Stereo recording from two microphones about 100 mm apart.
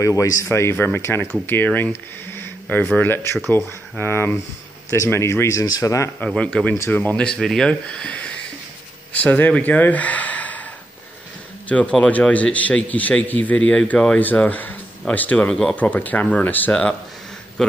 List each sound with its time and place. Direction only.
0.0 s speech: 35° left (ahead or behind)
6.1 s a man's voice: 10° left (ahead or behind)
11.7 s a man's voice: 15° left (ahead or behind)